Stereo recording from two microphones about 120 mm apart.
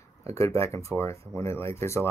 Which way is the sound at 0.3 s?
25° left (ahead or behind).